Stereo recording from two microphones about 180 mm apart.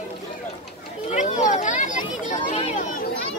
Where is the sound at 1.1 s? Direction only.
45° left (ahead or behind).